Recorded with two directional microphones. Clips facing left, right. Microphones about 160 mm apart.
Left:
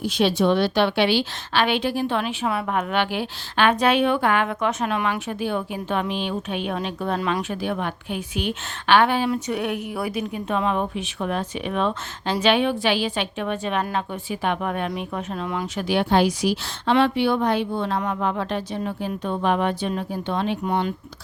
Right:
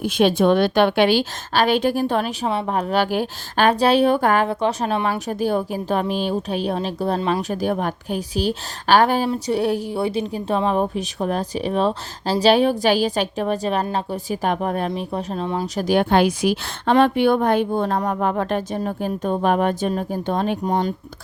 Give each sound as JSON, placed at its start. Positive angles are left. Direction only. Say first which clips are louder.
{"t": 0.0, "sound": "a woman's voice", "louder": "right 3 dB", "side_deg": -50}
{"t": 2.5, "sound": "a woman's voice", "louder": "right 3 dB", "side_deg": -30}